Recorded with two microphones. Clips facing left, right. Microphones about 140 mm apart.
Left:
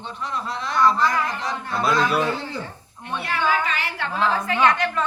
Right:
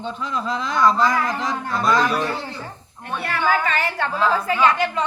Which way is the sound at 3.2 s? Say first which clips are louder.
Right 2 dB; 50° right (ahead or behind).